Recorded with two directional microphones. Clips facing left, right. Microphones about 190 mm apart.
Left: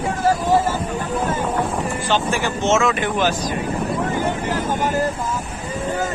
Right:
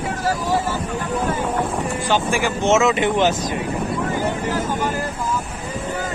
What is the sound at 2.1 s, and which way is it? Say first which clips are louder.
Speech: right 1 dB; 10° right (ahead or behind).